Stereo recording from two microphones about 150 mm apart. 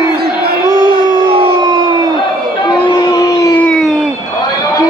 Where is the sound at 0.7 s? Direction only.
30° right (ahead or behind).